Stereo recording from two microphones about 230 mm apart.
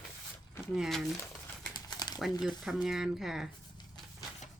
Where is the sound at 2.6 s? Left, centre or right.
Centre.